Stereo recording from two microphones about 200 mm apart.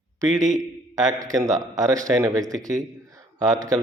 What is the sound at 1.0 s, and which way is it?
A man's voice, 15° right (ahead or behind).